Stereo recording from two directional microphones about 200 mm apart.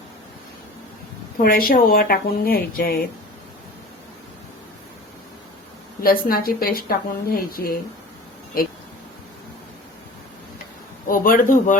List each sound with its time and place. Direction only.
1.4 s a woman's voice: 45° left (ahead or behind)
6.0 s a woman's voice: 45° left (ahead or behind)
11.1 s a woman's voice: 45° left (ahead or behind)